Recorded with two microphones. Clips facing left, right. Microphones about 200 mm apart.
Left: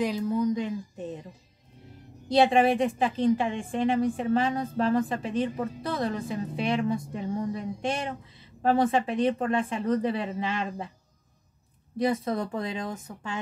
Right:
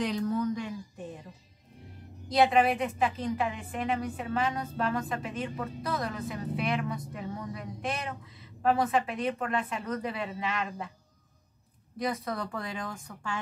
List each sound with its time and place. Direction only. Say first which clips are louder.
0.0 s a sound: left 3 dB; 10° left (ahead or behind)
2.2 s a woman's voice: left 3 dB; 30° left (ahead or behind)
12.0 s a woman's voice: left 6 dB; 25° left (ahead or behind)